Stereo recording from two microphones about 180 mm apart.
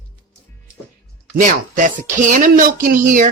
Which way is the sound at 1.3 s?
45° right (ahead or behind).